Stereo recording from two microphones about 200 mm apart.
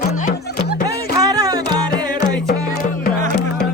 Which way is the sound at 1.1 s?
20° right (ahead or behind).